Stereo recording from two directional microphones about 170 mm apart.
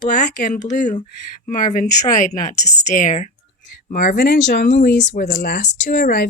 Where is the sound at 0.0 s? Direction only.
45° left (ahead or behind).